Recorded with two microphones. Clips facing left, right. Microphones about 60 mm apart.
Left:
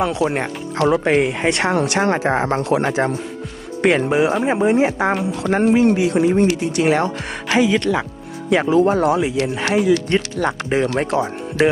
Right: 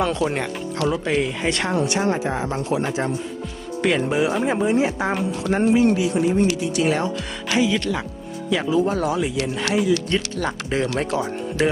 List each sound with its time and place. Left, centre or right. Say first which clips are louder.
0.0 s speech: left 3 dB; centre
0.9 s speech: left 6 dB; left
3.8 s speech: left 4 dB; left
4.1 s speech: left 4 dB; left
5.4 s speech: left 2 dB; left
6.1 s speech: left 4 dB; left
9.1 s speech: left 4 dB; left